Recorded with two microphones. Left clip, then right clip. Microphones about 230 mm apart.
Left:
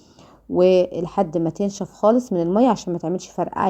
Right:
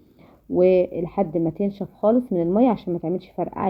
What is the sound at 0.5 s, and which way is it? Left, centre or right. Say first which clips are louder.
Speech: left 2 dB; left.